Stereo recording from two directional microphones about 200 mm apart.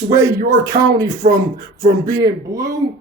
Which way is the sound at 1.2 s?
35° right (ahead or behind).